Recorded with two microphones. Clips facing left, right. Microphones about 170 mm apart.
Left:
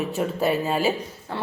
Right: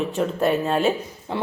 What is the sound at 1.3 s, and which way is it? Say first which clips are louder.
Speech: right 4 dB; 15° right (ahead or behind).